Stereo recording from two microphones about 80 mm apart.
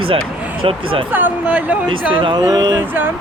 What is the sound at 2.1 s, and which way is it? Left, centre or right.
Speech, right.